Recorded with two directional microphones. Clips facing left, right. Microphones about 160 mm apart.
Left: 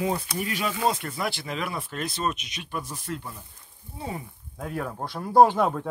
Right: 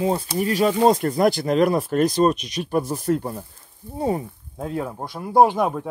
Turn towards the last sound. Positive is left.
turn(degrees=-15)  # may be behind; listen again after turning